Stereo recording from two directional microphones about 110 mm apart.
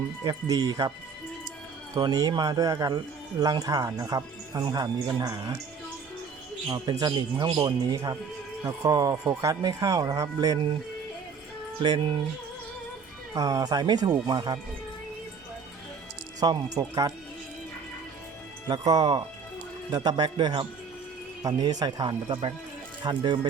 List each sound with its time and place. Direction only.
0.2 s speech: 35° right (ahead or behind)
2.0 s speech: 35° right (ahead or behind)
6.7 s speech: 40° right (ahead or behind)
11.8 s a man's voice: 45° right (ahead or behind)
13.3 s speech: 30° right (ahead or behind)
16.4 s speech: 40° right (ahead or behind)
18.7 s a man's voice: 35° right (ahead or behind)
21.4 s a man's voice: 35° right (ahead or behind)